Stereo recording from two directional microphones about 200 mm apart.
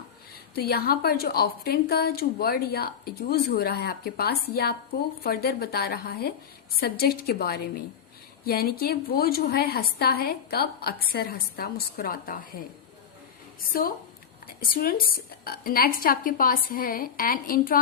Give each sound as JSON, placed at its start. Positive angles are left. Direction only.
{"t": 0.5, "sound": "a woman's voice", "side_deg": 50}
{"t": 14.4, "sound": "a woman's voice", "side_deg": 45}